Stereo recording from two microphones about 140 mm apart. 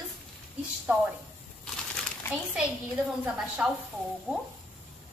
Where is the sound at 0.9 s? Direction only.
15° right (ahead or behind).